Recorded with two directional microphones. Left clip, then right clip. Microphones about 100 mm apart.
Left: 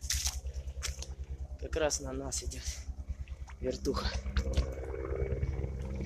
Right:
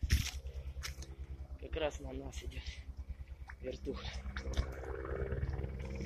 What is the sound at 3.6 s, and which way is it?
Speech, 70° left (ahead or behind).